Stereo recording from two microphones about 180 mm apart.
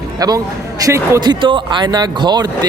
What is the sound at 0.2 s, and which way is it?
Speech, 20° right (ahead or behind).